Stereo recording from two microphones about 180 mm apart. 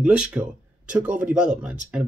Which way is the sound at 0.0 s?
5° right (ahead or behind).